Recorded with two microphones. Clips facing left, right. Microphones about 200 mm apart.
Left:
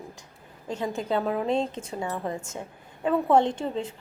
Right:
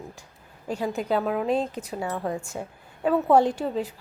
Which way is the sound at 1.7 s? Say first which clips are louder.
Right 2 dB; 25° left (ahead or behind).